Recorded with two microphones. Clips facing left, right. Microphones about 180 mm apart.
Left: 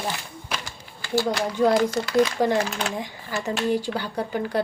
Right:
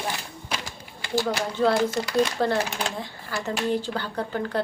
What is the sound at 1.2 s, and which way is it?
Speech, 15° left (ahead or behind).